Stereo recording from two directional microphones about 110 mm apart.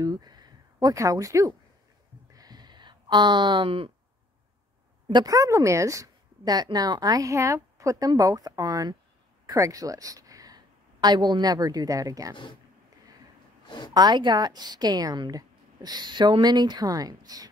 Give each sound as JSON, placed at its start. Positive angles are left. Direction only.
{"t": 0.0, "sound": "a sound", "side_deg": -40}
{"t": 5.0, "sound": "a woman's voice", "side_deg": -35}
{"t": 13.7, "sound": "a woman's voice", "side_deg": 45}
{"t": 13.9, "sound": "a woman's voice", "side_deg": -40}